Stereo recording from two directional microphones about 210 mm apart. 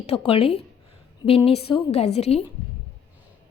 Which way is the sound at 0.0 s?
30° left (ahead or behind).